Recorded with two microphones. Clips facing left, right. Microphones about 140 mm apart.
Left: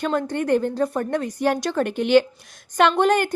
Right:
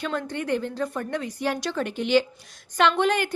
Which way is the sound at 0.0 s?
45° left (ahead or behind).